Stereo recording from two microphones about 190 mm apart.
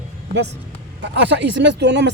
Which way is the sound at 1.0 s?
65° right (ahead or behind).